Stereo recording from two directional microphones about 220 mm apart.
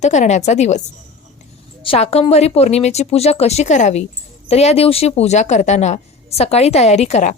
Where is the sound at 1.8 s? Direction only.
25° left (ahead or behind).